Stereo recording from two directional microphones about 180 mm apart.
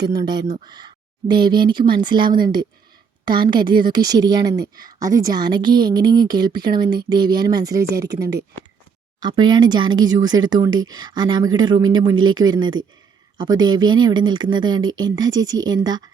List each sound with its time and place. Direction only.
0.0 s speech: 20° right (ahead or behind)
10.7 s speech: 90° right
10.9 s speech: 20° right (ahead or behind)